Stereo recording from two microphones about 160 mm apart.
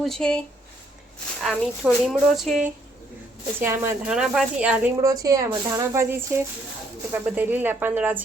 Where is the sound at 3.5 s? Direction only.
15° right (ahead or behind).